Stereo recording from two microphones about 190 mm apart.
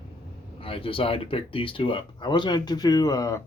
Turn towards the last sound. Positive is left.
turn(degrees=15)  # may be behind; listen again after turning